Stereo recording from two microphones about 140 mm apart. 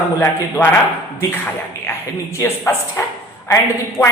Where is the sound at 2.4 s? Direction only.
15° left (ahead or behind).